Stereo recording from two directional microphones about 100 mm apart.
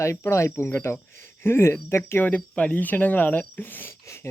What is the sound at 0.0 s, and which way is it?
Speech, 30° left (ahead or behind).